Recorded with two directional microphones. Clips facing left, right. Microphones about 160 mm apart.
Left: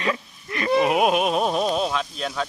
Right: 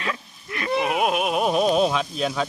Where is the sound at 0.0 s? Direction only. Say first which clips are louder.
Left 4 dB; centre (ahead or behind).